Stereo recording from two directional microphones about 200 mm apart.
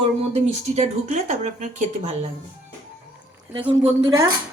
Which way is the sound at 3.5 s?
25° right (ahead or behind).